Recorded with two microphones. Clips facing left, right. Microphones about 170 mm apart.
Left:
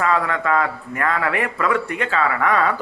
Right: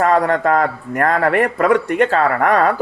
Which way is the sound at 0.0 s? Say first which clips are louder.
Right 6 dB; 45° right (ahead or behind).